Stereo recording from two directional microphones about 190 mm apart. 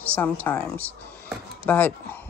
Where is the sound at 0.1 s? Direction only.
10° left (ahead or behind).